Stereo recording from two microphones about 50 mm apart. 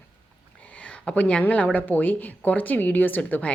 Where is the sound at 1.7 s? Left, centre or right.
Left.